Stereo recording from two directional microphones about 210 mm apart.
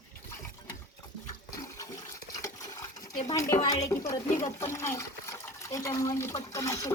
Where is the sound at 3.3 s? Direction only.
15° left (ahead or behind).